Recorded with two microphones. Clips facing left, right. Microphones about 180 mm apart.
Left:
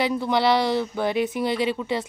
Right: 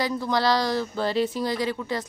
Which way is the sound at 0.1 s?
25° left (ahead or behind).